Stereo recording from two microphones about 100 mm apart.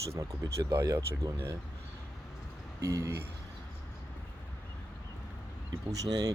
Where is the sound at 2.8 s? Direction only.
30° right (ahead or behind).